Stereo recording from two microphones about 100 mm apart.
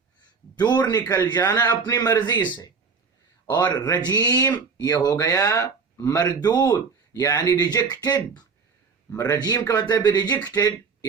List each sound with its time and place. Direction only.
0.6 s speech: 40° left (ahead or behind)